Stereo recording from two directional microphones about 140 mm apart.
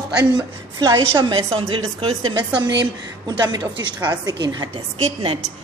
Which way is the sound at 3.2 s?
30° right (ahead or behind).